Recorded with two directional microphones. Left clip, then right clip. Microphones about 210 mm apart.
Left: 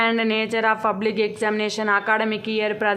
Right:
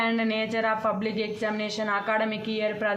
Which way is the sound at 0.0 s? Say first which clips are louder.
Left 6 dB; 40° left (ahead or behind).